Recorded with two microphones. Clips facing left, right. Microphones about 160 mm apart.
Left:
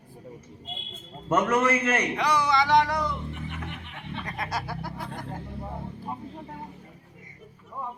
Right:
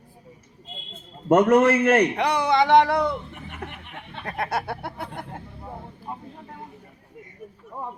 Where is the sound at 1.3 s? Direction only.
45° right (ahead or behind); by 5.3 s 65° right (ahead or behind).